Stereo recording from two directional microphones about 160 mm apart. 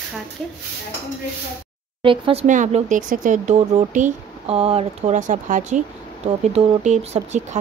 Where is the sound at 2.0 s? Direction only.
35° right (ahead or behind).